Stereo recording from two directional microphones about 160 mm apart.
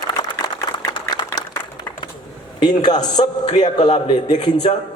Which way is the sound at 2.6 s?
25° left (ahead or behind).